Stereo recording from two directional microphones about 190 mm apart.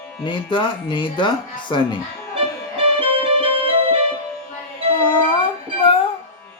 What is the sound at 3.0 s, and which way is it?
Music, 30° right (ahead or behind).